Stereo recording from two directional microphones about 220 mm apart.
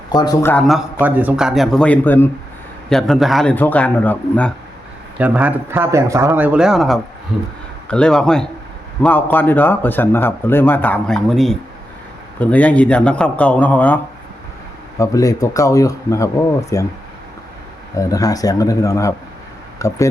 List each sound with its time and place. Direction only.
0.1 s a man's voice: 15° left (ahead or behind)
0.9 s speech: 5° right (ahead or behind)
5.2 s a man's voice: 5° right (ahead or behind); by 16.8 s 15° left (ahead or behind)
17.9 s a man's voice: 15° left (ahead or behind)